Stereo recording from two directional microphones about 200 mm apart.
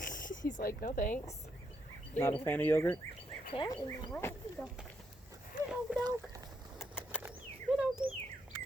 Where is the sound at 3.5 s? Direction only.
25° left (ahead or behind).